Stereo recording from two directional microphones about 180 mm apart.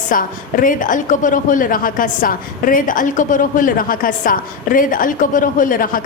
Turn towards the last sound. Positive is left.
turn(degrees=50)  # may be behind; listen again after turning